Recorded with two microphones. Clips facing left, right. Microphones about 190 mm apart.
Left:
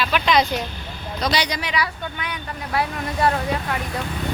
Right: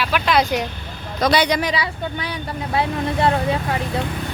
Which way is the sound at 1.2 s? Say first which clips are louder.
Right 6 dB; 55° right (ahead or behind).